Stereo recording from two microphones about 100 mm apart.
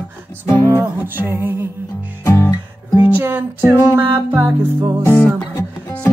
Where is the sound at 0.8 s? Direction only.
20° right (ahead or behind).